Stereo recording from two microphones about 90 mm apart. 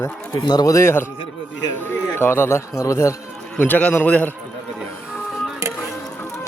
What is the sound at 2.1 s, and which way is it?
Speech, 25° left (ahead or behind).